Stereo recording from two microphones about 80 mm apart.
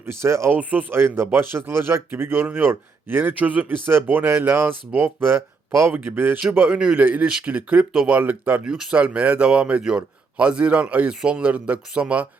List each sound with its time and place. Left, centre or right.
0.0 s speech: right
0.5 s speech: right
8.6 s speech: centre